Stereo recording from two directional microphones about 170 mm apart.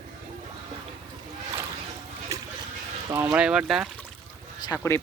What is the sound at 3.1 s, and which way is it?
Speech, 10° right (ahead or behind).